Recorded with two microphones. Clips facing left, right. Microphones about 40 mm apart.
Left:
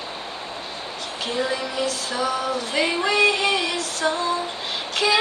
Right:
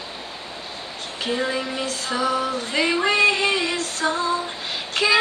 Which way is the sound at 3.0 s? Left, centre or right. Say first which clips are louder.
Even; right.